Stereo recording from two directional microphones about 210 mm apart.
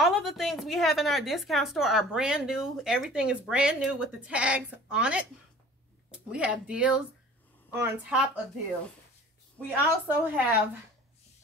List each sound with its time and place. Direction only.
0.0 s a woman's voice: centre (ahead or behind)
6.3 s a woman's voice: 5° right (ahead or behind)
9.7 s a woman's voice: 10° right (ahead or behind)